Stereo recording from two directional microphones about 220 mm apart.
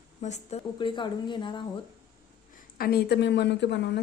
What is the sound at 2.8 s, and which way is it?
A woman's voice, 45° left (ahead or behind).